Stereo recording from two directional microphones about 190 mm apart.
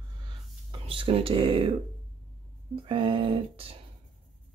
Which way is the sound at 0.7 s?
30° right (ahead or behind).